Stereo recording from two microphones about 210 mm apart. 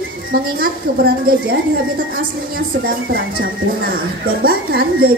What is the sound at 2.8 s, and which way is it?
A woman's voice, 45° right (ahead or behind).